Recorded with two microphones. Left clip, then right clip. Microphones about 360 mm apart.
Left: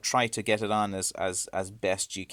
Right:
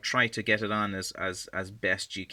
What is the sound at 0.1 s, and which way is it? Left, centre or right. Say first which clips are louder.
Speech: even; centre.